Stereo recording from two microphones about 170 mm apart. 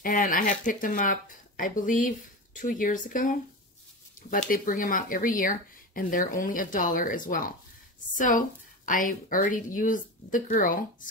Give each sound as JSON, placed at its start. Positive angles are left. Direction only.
{"t": 0.0, "sound": "speech", "side_deg": 55}